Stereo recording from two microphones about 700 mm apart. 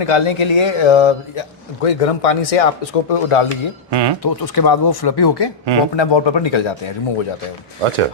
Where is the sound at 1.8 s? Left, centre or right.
Left.